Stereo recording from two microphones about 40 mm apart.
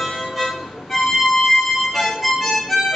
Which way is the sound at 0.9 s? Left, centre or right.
Centre.